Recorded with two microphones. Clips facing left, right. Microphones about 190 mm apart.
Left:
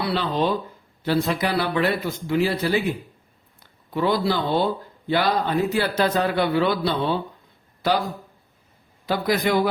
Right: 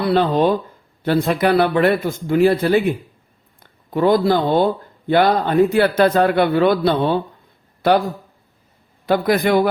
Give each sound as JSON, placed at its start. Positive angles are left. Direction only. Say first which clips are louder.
{"t": 0.0, "sound": "speech", "louder": "right 7 dB", "side_deg": -50}
{"t": 9.0, "sound": "speech", "louder": "right 6 dB", "side_deg": -55}